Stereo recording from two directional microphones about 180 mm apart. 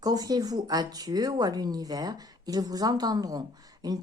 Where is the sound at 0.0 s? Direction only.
20° right (ahead or behind).